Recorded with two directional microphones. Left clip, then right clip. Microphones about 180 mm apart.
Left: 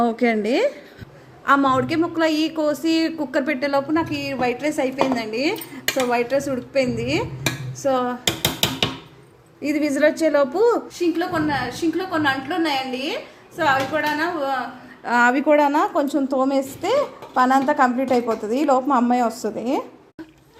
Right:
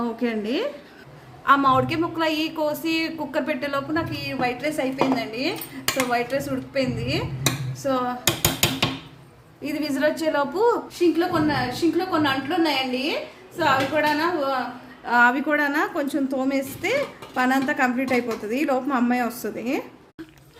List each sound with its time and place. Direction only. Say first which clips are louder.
0.0 s a woman's voice: left 7 dB; 40° left (ahead or behind)
9.6 s a woman's voice: left 5 dB; 25° left (ahead or behind)